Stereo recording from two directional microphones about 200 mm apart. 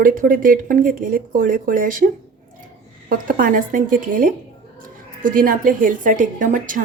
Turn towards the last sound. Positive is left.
turn(degrees=-40)  # may be behind; listen again after turning